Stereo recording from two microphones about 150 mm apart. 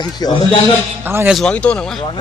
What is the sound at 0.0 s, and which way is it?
Speech, 30° left (ahead or behind).